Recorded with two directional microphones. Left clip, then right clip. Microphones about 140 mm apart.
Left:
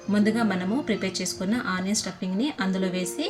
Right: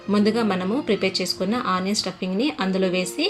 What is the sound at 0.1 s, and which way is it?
Speech, 15° right (ahead or behind).